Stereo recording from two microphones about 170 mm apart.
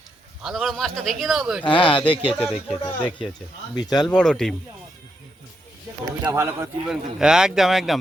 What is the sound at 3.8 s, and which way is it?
Speech, 25° left (ahead or behind).